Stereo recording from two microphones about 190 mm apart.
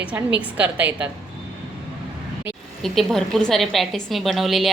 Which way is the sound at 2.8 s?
Centre (ahead or behind).